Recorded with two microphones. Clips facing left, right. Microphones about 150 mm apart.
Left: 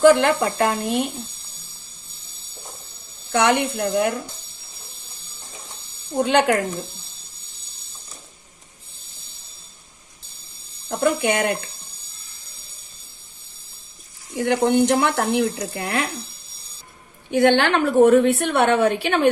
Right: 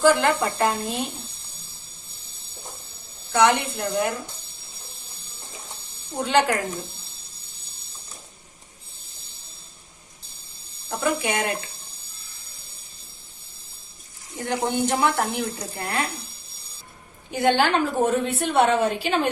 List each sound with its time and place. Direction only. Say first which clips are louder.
0.0 s a woman's voice: left 4 dB; 65° left (ahead or behind)
3.3 s a woman's voice: left 1 dB; 60° left (ahead or behind)
6.1 s a woman's voice: left 3 dB; 60° left (ahead or behind)
10.8 s speech: left 5 dB; 40° left (ahead or behind)
11.2 s a woman's voice: left 5 dB; 60° left (ahead or behind)
14.3 s speech: left 7 dB; 70° left (ahead or behind)
17.3 s a woman's voice: left 4 dB; 70° left (ahead or behind)